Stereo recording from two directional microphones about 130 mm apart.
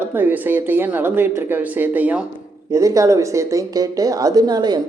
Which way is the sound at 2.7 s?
25° right (ahead or behind).